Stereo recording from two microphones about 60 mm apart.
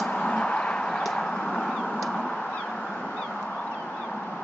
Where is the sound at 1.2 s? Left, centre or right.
Centre.